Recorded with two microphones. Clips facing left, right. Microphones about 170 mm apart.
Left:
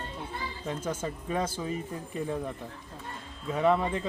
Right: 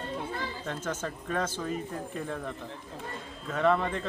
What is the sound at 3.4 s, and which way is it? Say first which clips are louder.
Speech: left 1 dB; 10° left (ahead or behind).